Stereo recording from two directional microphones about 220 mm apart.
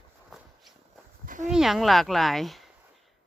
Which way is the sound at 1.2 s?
35° right (ahead or behind).